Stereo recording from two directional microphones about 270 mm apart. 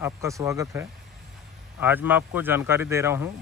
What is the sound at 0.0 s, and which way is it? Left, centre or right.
A man's voice, centre.